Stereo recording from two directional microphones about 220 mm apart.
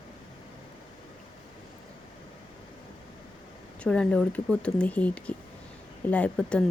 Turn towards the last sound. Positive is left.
turn(degrees=5)  # may be behind; listen again after turning